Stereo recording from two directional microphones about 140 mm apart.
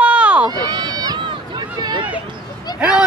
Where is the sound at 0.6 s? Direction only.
30° right (ahead or behind).